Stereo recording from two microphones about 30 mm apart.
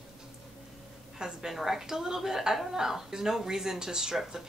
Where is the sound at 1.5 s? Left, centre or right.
Centre.